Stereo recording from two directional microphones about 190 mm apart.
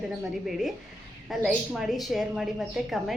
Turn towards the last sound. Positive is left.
turn(degrees=0)  # may be behind; listen again after turning